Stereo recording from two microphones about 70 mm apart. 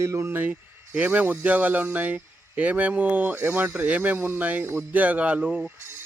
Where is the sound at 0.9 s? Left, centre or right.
Right.